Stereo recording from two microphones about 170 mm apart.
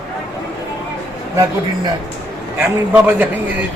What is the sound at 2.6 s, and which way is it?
Speech, 10° right (ahead or behind).